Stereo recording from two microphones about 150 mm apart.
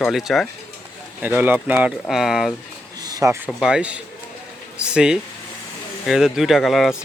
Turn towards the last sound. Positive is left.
turn(degrees=0)  # may be behind; listen again after turning